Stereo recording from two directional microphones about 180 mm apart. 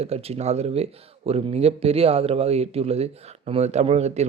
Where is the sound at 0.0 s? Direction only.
35° right (ahead or behind).